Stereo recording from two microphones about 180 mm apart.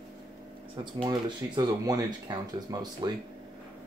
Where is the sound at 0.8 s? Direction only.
25° right (ahead or behind).